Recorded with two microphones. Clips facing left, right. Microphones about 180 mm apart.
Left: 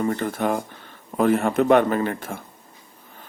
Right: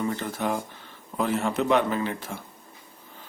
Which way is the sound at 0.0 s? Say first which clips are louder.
Left 5 dB; 50° left (ahead or behind).